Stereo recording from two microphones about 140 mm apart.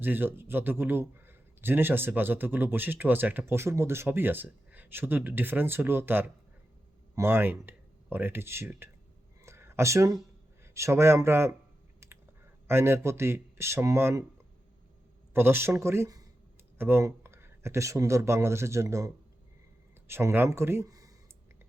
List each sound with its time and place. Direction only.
0.0 s speech: 15° right (ahead or behind)
9.4 s a sound: 20° right (ahead or behind)
10.6 s speech: 20° right (ahead or behind)
12.0 s clicking: 20° right (ahead or behind)
12.6 s speech: 15° right (ahead or behind)
15.3 s speech: 15° right (ahead or behind)